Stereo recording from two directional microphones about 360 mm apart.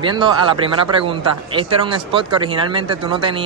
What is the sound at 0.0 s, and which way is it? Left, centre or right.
Speech, centre.